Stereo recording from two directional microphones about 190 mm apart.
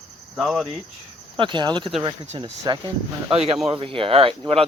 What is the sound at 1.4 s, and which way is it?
Speech, 25° right (ahead or behind).